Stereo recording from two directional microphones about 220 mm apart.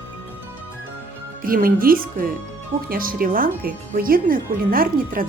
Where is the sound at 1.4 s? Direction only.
40° right (ahead or behind).